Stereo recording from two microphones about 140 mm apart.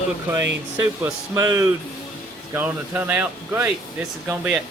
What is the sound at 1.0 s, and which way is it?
Speech, 25° right (ahead or behind).